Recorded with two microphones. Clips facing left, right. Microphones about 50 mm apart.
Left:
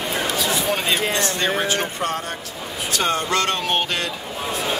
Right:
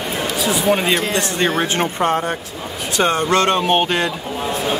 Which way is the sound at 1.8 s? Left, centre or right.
Right.